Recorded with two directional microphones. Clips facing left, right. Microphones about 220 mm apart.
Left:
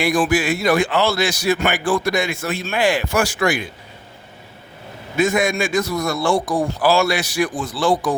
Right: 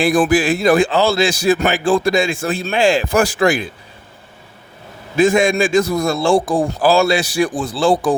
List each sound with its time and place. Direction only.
0.0 s speech: 35° right (ahead or behind)
5.1 s speech: 30° right (ahead or behind)